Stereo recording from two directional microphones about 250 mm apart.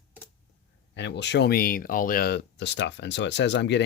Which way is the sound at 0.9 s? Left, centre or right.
Left.